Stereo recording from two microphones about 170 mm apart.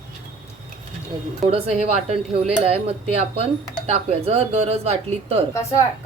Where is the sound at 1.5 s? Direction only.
40° right (ahead or behind).